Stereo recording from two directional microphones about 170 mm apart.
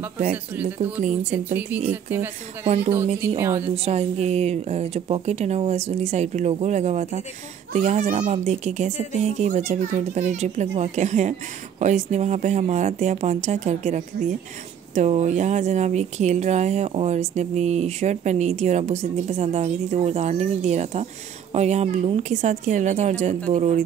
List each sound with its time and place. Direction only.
1.4 s speech: 10° right (ahead or behind)
3.3 s speech: 15° right (ahead or behind)
3.7 s speech: 40° right (ahead or behind)